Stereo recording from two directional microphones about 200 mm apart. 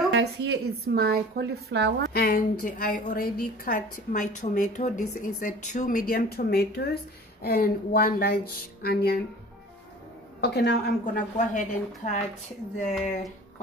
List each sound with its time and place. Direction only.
0.1 s a woman's voice: 55° right (ahead or behind)
2.1 s speech: 50° left (ahead or behind)
4.1 s speech: 35° left (ahead or behind)
10.4 s a woman's voice: 55° left (ahead or behind)
11.3 s speech: 40° left (ahead or behind)